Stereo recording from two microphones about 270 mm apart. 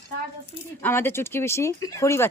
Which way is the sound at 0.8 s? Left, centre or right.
Centre.